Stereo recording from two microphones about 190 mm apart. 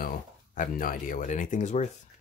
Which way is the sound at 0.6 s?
45° left (ahead or behind).